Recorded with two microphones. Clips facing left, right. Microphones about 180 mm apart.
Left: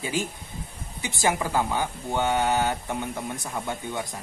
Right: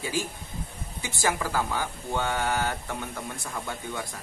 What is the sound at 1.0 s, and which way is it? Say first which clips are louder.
Speech: left 3 dB; 20° left (ahead or behind).